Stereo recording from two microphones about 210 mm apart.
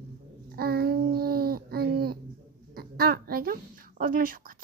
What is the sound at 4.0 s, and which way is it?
Speech, 40° right (ahead or behind).